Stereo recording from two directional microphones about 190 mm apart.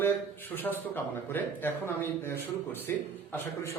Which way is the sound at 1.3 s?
10° left (ahead or behind).